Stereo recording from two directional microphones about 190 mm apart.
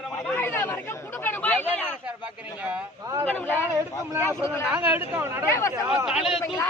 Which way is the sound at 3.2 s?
10° left (ahead or behind).